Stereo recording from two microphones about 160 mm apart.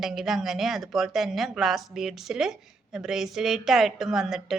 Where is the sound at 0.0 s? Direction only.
Centre (ahead or behind).